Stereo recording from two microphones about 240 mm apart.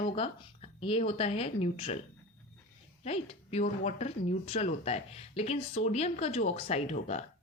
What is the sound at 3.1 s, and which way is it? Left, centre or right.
Speech, left.